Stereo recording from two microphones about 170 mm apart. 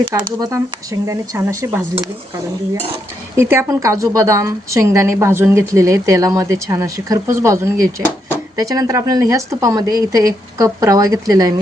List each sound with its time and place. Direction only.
0.3 s a woman's voice: 20° right (ahead or behind)
3.3 s a woman's voice: 15° right (ahead or behind)